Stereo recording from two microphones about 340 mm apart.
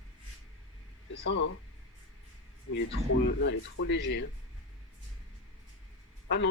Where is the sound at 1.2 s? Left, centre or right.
Left.